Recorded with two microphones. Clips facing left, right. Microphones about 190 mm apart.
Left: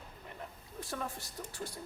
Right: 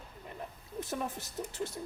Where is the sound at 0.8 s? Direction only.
20° right (ahead or behind).